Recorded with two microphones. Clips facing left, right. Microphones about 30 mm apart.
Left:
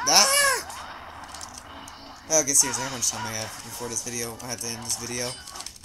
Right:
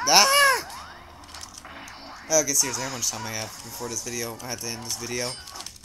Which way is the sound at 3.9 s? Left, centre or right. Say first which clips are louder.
Right 1 dB; centre.